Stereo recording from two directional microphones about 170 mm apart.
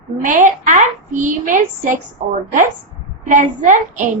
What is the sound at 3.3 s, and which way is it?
Speech, 50° right (ahead or behind).